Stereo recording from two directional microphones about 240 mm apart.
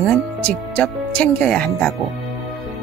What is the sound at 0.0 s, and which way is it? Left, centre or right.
Speech, centre.